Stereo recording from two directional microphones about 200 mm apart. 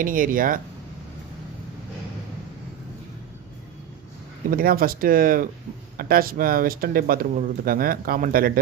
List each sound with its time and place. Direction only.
0.0 s speech: 45° right (ahead or behind)
4.5 s speech: 45° right (ahead or behind)